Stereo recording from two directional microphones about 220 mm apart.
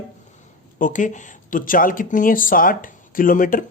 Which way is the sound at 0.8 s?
35° left (ahead or behind).